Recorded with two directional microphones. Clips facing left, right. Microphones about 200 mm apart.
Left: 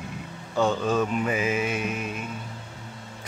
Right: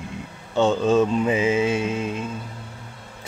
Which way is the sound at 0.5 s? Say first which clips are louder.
Right 5 dB; 25° right (ahead or behind).